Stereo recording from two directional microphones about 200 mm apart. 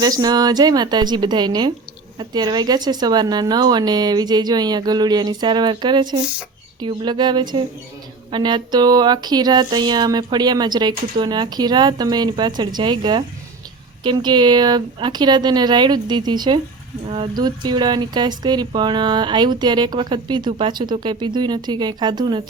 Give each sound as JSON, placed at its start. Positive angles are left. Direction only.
{"t": 0.0, "sound": "speech", "side_deg": -20}